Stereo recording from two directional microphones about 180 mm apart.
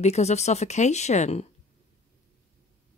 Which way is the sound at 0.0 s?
40° left (ahead or behind).